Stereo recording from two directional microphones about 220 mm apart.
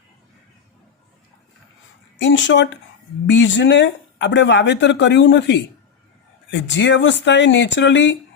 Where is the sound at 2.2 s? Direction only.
55° left (ahead or behind).